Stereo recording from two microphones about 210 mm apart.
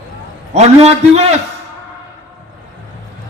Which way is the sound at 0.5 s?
30° right (ahead or behind).